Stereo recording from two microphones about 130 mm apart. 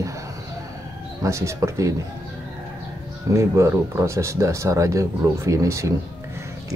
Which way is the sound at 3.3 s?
20° right (ahead or behind).